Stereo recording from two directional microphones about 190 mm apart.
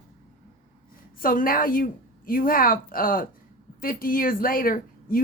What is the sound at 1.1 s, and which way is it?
A woman's voice, 45° left (ahead or behind).